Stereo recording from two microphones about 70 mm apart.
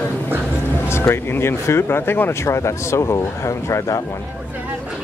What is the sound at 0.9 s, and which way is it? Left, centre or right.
Speech, left.